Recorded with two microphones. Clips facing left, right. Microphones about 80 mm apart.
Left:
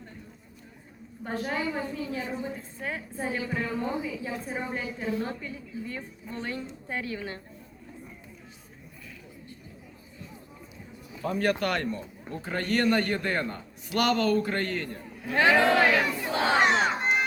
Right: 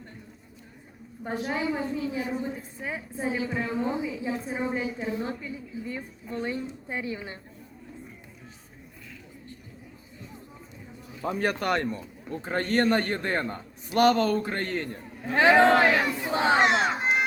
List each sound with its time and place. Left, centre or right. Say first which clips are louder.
1.2 s a woman's voice: right 1 dB; centre
11.2 s a man's voice: left 1 dB; right
16.3 s a man's voice: right 3 dB; right
16.6 s crowd: right 1 dB; centre